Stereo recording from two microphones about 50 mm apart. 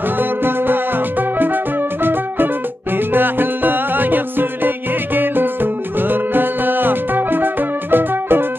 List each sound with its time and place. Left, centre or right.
0.2 s music: right